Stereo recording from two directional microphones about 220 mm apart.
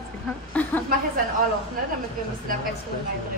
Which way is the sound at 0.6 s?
5° left (ahead or behind).